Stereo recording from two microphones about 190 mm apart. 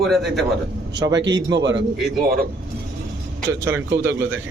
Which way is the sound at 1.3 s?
20° right (ahead or behind).